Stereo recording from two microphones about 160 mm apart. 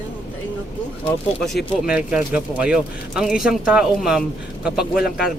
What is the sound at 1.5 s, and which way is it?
Speech, 5° right (ahead or behind).